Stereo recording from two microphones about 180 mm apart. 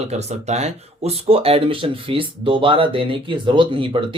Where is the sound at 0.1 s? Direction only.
35° right (ahead or behind).